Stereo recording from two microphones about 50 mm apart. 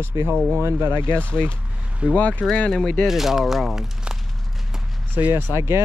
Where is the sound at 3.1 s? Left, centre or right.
Centre.